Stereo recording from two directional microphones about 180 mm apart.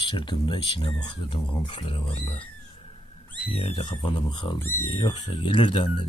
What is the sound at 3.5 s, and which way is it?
Speech, 35° left (ahead or behind).